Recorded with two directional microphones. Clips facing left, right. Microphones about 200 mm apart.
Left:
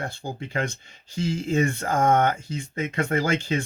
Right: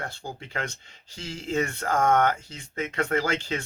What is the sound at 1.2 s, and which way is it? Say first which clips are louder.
Speech: left 5 dB; 10° left (ahead or behind).